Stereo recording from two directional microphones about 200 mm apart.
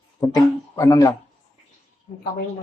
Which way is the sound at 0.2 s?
20° left (ahead or behind).